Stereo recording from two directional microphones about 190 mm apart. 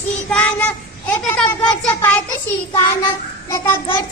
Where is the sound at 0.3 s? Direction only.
5° left (ahead or behind).